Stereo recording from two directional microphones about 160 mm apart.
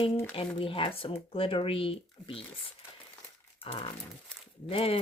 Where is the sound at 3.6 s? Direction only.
35° left (ahead or behind).